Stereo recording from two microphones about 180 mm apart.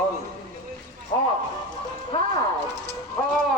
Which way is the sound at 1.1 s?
25° left (ahead or behind).